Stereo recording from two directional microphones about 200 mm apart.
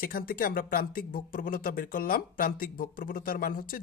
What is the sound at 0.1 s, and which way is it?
Speech, 45° left (ahead or behind).